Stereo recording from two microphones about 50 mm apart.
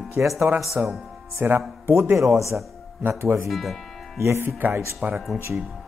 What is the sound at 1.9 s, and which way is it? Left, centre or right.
Speech, right.